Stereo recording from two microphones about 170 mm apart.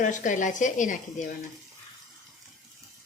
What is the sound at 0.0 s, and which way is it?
A woman's voice, 50° left (ahead or behind).